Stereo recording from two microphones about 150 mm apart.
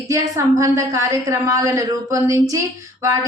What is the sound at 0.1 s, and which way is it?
A woman's voice, 20° right (ahead or behind).